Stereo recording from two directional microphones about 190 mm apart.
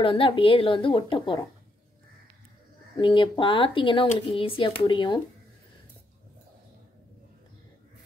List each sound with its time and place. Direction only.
0.0 s speech: 25° left (ahead or behind)
3.0 s speech: 25° left (ahead or behind)